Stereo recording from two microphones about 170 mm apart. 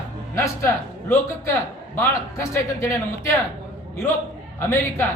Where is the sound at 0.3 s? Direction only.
15° left (ahead or behind).